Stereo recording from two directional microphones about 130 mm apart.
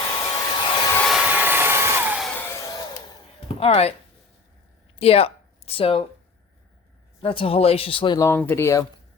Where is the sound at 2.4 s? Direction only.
20° left (ahead or behind).